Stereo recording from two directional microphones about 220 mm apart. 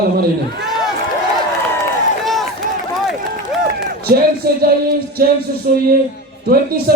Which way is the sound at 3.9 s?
45° right (ahead or behind).